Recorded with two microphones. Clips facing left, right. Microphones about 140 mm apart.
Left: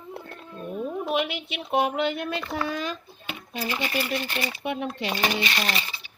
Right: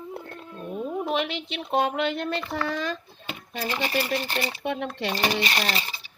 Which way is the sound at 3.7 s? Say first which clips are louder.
Right 2 dB; 40° right (ahead or behind).